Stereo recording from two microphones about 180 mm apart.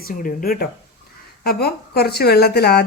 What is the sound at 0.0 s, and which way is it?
A woman's voice, 50° left (ahead or behind).